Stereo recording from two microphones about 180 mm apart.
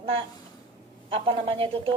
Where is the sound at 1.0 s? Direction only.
30° right (ahead or behind).